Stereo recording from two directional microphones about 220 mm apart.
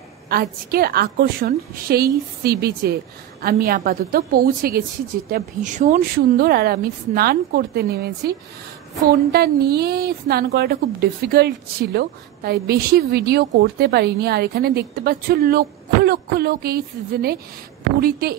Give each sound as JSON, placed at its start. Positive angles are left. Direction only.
{"t": 0.3, "sound": "a woman's voice", "side_deg": -45}